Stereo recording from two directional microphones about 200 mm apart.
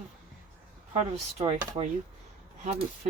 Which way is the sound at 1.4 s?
30° right (ahead or behind).